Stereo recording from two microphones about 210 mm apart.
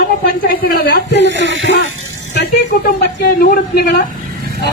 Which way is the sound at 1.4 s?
60° right (ahead or behind).